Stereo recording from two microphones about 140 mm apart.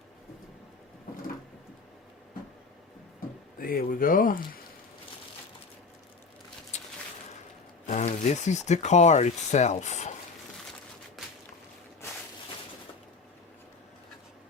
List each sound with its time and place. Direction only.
3.6 s speech: 90° left
7.9 s speech: 55° left (ahead or behind)
11.2 s whip: centre (ahead or behind)